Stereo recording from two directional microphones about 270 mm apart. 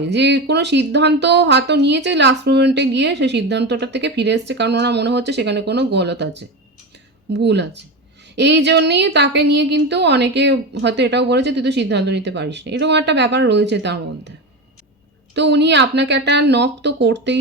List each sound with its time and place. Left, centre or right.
0.1 s speech: right
15.4 s speech: right